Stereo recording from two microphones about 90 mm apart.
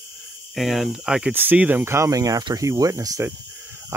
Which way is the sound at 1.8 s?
30° right (ahead or behind).